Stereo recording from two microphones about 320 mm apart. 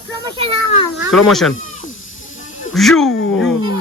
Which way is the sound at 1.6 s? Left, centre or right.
Left.